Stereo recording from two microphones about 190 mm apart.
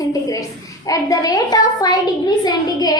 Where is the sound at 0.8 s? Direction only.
20° left (ahead or behind).